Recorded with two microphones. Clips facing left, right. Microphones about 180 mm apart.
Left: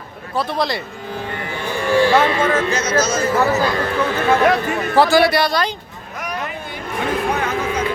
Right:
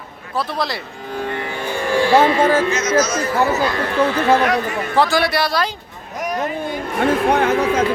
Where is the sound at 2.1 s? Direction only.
30° right (ahead or behind).